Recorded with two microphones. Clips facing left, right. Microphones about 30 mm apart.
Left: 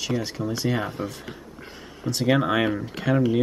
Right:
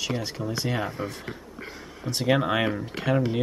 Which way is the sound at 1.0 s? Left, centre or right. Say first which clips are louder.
Left 1 dB; right.